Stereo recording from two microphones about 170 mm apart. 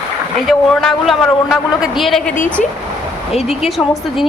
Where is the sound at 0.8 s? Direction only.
5° left (ahead or behind).